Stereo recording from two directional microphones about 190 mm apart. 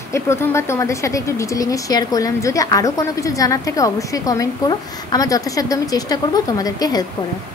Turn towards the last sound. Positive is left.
turn(degrees=20)  # may be behind; listen again after turning